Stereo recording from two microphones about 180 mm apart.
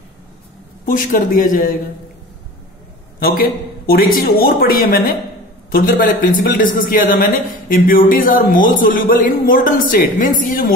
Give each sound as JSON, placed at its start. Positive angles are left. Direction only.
{"t": 0.8, "sound": "a man's voice", "side_deg": 50}
{"t": 3.2, "sound": "a man's voice", "side_deg": 55}